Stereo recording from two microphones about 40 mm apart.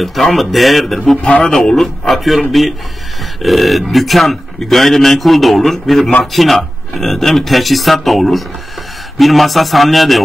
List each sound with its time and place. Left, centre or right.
0.0 s speech: centre
1.2 s a man's voice: left
1.8 s speech: centre
3.4 s speech: centre